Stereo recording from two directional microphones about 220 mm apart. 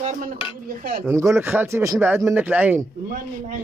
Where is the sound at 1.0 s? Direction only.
15° right (ahead or behind).